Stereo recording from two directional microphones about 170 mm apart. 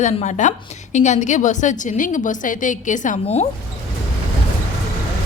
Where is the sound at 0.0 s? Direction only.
45° left (ahead or behind).